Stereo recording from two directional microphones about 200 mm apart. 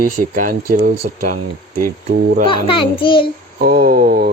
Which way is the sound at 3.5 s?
50° right (ahead or behind).